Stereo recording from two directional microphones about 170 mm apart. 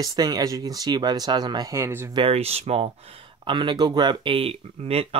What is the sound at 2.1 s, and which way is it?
Speech, 35° right (ahead or behind).